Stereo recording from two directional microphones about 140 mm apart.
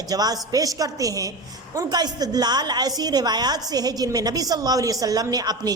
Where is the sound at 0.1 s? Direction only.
25° right (ahead or behind).